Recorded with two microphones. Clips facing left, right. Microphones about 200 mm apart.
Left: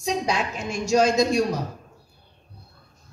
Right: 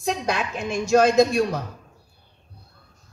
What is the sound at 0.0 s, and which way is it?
A woman's voice, 55° right (ahead or behind).